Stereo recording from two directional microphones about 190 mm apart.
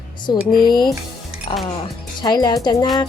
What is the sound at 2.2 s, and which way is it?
Speech, 25° left (ahead or behind).